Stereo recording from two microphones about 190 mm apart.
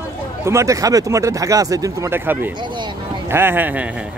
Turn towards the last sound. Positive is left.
turn(degrees=-10)  # may be behind; listen again after turning